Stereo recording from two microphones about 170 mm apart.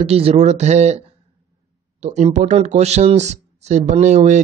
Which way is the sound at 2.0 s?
45° right (ahead or behind).